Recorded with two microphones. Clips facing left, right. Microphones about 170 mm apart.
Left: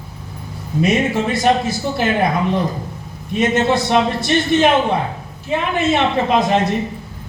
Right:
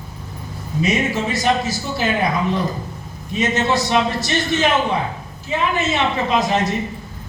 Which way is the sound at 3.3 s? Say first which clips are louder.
Left 3 dB; 55° left (ahead or behind).